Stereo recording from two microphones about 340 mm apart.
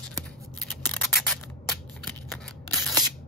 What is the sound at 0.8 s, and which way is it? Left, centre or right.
Scissors, centre.